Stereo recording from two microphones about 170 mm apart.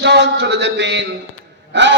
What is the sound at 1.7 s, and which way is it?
Gasp, 90° right.